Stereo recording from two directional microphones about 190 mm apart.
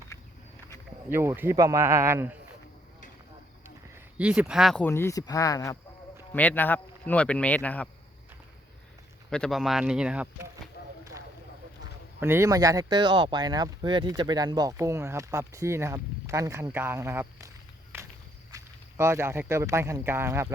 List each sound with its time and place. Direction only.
1.1 s speech: 10° right (ahead or behind)
3.9 s speech: 5° right (ahead or behind)
9.3 s speech: centre (ahead or behind)
12.2 s speech: 15° right (ahead or behind)
18.5 s speech: 15° right (ahead or behind)